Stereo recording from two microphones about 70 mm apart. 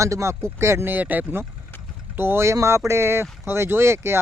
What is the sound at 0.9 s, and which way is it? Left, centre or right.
Speech, right.